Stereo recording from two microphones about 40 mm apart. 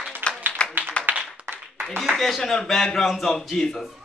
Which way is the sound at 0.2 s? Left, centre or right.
Right.